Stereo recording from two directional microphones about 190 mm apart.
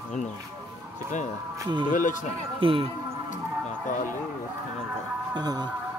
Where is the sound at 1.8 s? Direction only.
45° left (ahead or behind).